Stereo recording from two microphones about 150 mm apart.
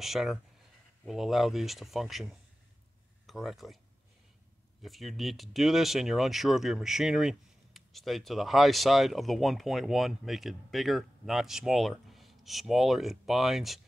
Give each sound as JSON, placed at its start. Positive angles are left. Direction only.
{"t": 0.0, "sound": "speech", "side_deg": 0}
{"t": 4.8, "sound": "speech", "side_deg": 0}